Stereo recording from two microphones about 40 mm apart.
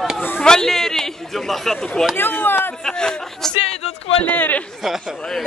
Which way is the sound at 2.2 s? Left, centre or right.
Left.